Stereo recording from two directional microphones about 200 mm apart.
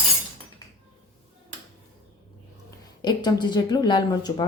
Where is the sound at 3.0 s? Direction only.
20° left (ahead or behind).